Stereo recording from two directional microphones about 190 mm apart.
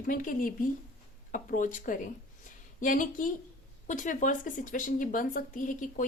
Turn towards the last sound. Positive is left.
turn(degrees=45)  # may be behind; listen again after turning